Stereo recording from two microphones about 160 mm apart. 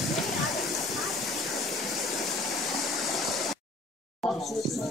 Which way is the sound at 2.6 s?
Centre (ahead or behind).